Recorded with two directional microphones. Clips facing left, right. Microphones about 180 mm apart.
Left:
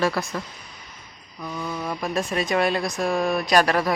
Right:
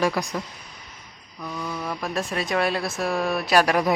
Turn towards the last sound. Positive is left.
turn(degrees=-10)  # may be behind; listen again after turning